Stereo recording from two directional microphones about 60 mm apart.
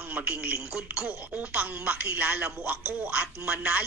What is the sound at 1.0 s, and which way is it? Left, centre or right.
A woman's voice, right.